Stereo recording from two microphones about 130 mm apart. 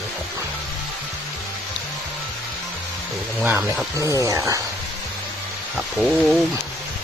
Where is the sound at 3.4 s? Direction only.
15° right (ahead or behind).